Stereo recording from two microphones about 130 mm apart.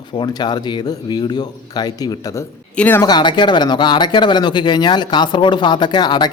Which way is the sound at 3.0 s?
35° left (ahead or behind).